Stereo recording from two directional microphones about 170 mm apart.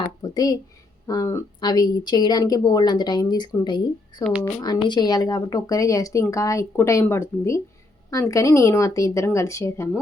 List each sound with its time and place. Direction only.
0.0 s a sound: 20° left (ahead or behind)
1.0 s speech: 20° left (ahead or behind)
4.2 s speech: 5° right (ahead or behind)
4.4 s speech: 25° left (ahead or behind)